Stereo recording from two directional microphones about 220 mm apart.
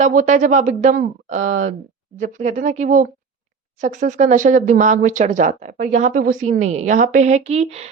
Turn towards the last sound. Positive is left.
turn(degrees=-30)  # may be behind; listen again after turning